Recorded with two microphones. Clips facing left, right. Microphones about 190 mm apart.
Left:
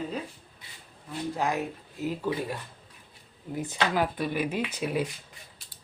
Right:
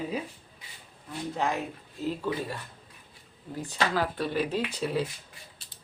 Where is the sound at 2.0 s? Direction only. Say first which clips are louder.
Left 1 dB; 10° left (ahead or behind).